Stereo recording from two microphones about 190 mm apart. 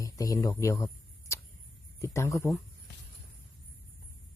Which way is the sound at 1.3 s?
15° left (ahead or behind).